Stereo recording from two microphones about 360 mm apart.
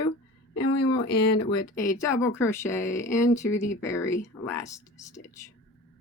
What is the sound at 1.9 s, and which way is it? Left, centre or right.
Speech, centre.